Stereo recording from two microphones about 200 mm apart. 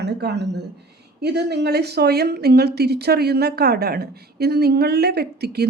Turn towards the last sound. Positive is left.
turn(degrees=-55)  # may be behind; listen again after turning